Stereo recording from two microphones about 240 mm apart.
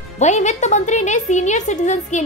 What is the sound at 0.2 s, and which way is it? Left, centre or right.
Speech, left.